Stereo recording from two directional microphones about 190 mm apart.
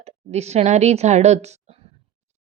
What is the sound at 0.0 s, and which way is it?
A woman's voice, 35° right (ahead or behind).